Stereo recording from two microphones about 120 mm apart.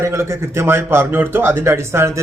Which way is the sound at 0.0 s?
25° right (ahead or behind).